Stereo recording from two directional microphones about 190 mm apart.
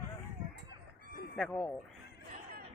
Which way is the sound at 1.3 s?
5° left (ahead or behind).